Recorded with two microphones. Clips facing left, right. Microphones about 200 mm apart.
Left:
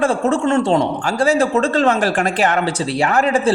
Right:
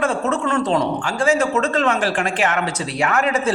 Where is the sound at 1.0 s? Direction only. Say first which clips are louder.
Left 3 dB; 40° left (ahead or behind).